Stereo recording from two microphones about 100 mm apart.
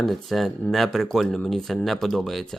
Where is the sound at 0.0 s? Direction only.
Centre (ahead or behind).